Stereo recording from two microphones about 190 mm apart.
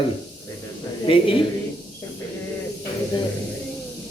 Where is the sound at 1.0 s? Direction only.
30° left (ahead or behind).